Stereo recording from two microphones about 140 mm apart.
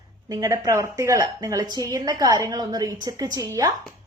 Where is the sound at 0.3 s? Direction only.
25° right (ahead or behind).